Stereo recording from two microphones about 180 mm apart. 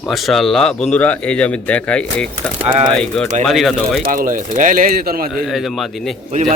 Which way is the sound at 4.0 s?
50° right (ahead or behind).